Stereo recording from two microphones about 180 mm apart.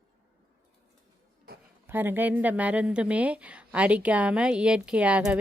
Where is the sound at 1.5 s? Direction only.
60° right (ahead or behind).